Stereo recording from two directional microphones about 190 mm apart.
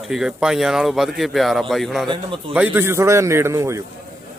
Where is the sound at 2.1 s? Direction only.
25° right (ahead or behind).